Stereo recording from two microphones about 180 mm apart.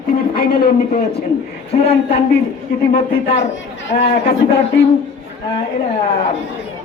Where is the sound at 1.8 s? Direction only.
35° left (ahead or behind).